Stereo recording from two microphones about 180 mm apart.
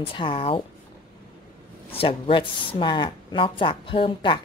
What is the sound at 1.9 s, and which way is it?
Speech, 30° left (ahead or behind).